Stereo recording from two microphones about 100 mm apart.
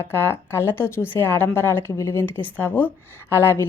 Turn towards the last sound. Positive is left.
turn(degrees=25)  # may be behind; listen again after turning